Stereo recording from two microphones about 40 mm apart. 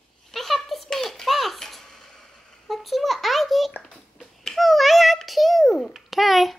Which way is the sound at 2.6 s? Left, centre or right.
Centre.